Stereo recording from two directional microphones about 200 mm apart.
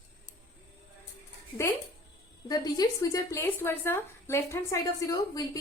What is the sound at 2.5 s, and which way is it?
A woman's voice, 20° left (ahead or behind).